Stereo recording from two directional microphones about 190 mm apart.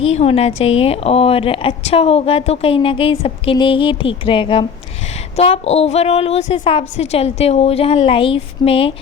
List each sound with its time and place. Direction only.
0.0 s a woman's voice: 30° left (ahead or behind)